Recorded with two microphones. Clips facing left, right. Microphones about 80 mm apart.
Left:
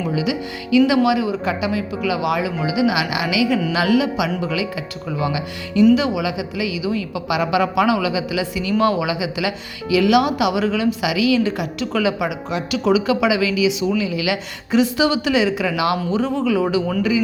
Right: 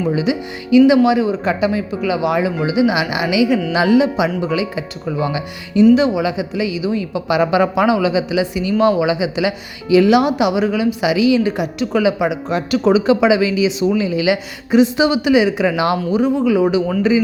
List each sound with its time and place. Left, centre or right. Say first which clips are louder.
0.1 s speech: right 3 dB; right
15.6 s speech: right 3 dB; right
16.0 s speech: right 4 dB; centre
17.0 s speech: right 5 dB; right